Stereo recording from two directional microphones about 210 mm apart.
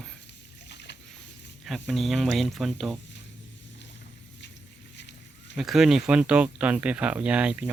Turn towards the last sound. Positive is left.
turn(degrees=-5)  # may be behind; listen again after turning